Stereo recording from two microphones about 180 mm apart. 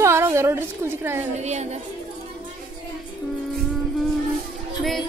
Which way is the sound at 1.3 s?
40° right (ahead or behind).